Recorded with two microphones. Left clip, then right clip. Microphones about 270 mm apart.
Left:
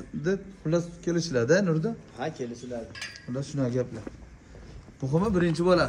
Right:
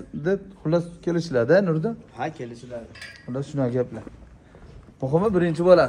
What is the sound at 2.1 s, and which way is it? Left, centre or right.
Speech, right.